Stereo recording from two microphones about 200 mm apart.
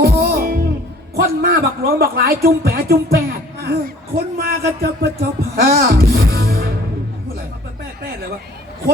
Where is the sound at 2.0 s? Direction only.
50° right (ahead or behind).